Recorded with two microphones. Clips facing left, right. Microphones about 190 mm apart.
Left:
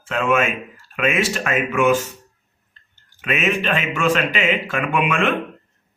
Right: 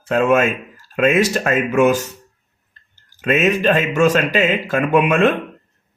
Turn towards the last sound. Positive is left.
turn(degrees=-40)  # may be behind; listen again after turning